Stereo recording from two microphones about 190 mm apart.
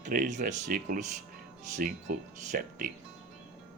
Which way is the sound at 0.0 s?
40° right (ahead or behind).